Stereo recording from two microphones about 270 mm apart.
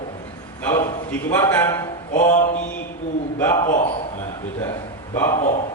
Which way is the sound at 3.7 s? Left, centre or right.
Left.